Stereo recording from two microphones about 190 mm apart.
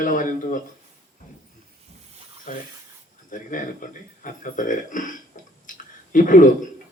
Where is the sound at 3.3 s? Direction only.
45° left (ahead or behind).